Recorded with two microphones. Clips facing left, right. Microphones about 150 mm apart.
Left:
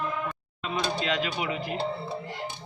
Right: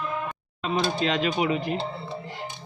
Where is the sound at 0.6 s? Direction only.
30° right (ahead or behind).